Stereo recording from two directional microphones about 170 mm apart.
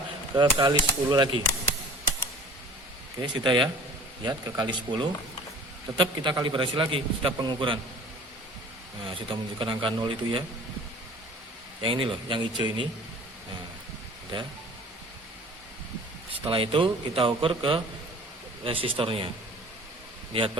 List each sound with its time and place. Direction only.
0.3 s a man's voice: 25° right (ahead or behind)
3.2 s a man's voice: 25° right (ahead or behind)
9.0 s a man's voice: 30° right (ahead or behind)
11.8 s a man's voice: 30° right (ahead or behind)
16.5 s a man's voice: 30° right (ahead or behind)